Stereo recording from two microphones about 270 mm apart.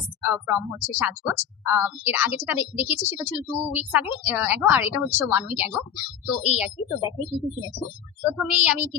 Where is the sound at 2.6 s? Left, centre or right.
Centre.